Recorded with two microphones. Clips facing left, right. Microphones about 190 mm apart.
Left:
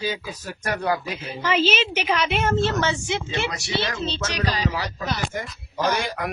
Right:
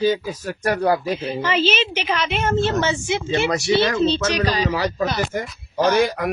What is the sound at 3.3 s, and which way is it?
Speech, 50° right (ahead or behind).